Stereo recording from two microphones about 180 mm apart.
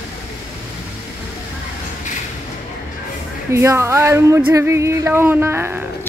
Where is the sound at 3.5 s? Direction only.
15° right (ahead or behind).